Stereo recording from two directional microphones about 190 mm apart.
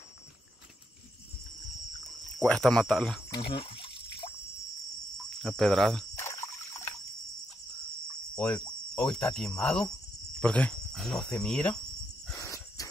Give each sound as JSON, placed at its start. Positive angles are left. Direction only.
{"t": 2.4, "sound": "speech", "side_deg": 5}
{"t": 3.3, "sound": "trickle", "side_deg": 25}
{"t": 5.4, "sound": "speech", "side_deg": 0}
{"t": 6.1, "sound": "insect", "side_deg": 15}
{"t": 8.4, "sound": "cricket", "side_deg": 5}
{"t": 10.4, "sound": "speech", "side_deg": 5}
{"t": 12.4, "sound": "a sound", "side_deg": 15}